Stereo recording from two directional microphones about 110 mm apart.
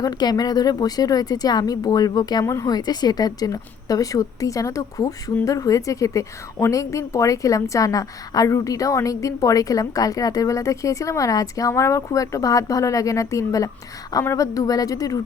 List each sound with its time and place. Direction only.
0.0 s speech: 35° left (ahead or behind)